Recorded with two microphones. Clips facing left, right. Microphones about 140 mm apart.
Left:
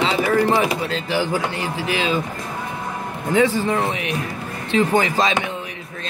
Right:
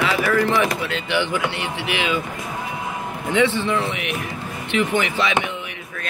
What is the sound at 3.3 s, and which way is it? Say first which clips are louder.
Speech: left 2 dB; 40° left (ahead or behind).